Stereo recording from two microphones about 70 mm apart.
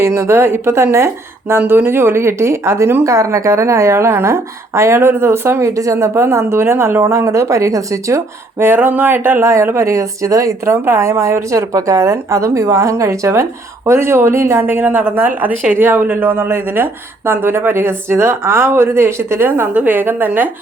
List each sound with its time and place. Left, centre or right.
0.0 s speech: right
1.5 s speech: right
8.5 s speech: right
10.7 s speech: right
14.6 s a woman's voice: right